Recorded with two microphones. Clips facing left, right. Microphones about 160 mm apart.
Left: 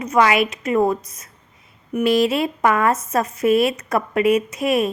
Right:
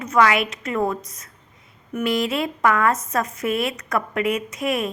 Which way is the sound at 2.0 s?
25° left (ahead or behind).